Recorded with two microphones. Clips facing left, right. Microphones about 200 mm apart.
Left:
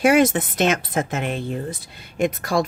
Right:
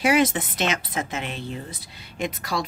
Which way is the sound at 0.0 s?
50° left (ahead or behind).